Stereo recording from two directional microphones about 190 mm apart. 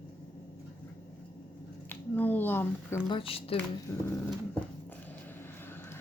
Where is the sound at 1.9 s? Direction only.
10° left (ahead or behind).